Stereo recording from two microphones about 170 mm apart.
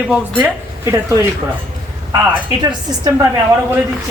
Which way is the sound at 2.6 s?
25° right (ahead or behind).